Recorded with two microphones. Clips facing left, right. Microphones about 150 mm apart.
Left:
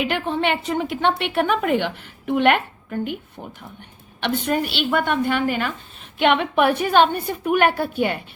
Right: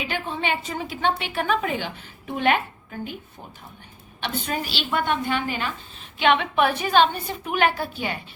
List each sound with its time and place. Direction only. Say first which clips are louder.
0.0 s a woman's voice: left 6 dB; 65° left (ahead or behind)
4.2 s a woman's voice: left 6 dB; 60° left (ahead or behind)